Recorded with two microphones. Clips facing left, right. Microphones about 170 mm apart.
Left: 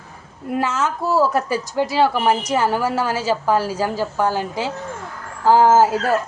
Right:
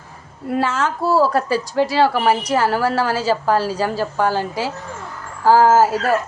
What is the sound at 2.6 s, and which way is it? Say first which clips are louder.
A woman's voice: right 2 dB; 15° left (ahead or behind).